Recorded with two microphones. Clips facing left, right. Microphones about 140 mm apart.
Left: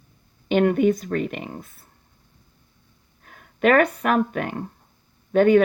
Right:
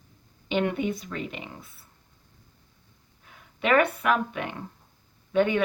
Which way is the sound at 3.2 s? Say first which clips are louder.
Left 9 dB; 50° left (ahead or behind).